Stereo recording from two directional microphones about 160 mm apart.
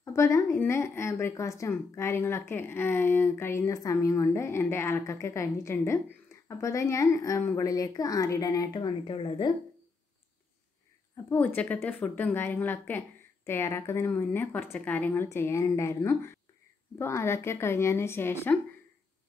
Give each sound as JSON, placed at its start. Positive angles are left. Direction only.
{"t": 0.0, "sound": "a woman's voice", "side_deg": 20}
{"t": 11.2, "sound": "a woman's voice", "side_deg": 10}